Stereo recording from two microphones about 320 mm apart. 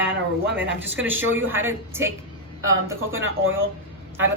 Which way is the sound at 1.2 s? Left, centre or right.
Right.